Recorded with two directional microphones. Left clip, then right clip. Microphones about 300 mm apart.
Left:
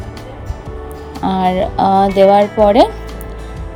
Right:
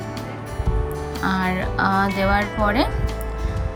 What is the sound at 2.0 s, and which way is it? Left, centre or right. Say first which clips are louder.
Speech: left 11 dB; centre.